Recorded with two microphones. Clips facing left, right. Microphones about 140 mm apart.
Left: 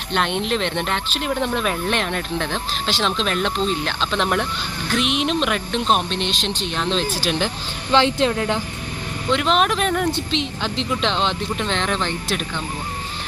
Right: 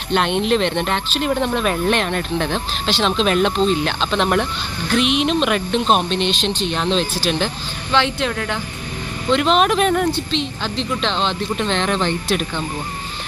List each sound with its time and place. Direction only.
0.1 s speech: centre (ahead or behind)
7.9 s a woman's voice: 30° left (ahead or behind)
9.3 s speech: centre (ahead or behind)
10.1 s speech: 15° left (ahead or behind)